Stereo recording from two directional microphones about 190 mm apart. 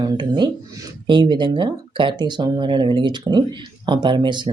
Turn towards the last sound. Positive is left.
turn(degrees=-25)  # may be behind; listen again after turning